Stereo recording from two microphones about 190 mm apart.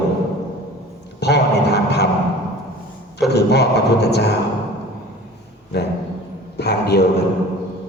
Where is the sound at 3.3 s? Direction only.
60° left (ahead or behind).